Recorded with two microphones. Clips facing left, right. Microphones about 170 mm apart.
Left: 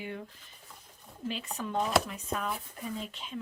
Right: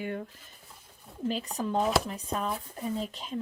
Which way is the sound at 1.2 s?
40° right (ahead or behind).